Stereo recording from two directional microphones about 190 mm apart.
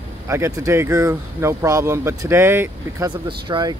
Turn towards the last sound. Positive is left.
turn(degrees=-25)  # may be behind; listen again after turning